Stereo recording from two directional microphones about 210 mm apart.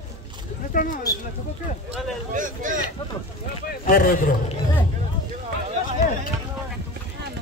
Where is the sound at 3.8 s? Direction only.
40° left (ahead or behind).